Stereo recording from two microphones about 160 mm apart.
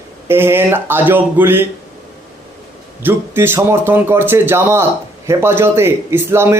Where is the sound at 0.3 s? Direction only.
15° right (ahead or behind).